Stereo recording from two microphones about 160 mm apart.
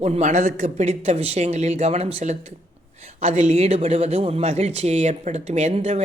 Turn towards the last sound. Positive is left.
turn(degrees=-45)  # may be behind; listen again after turning